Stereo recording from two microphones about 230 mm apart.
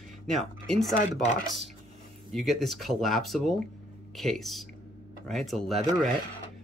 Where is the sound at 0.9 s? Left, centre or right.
Left.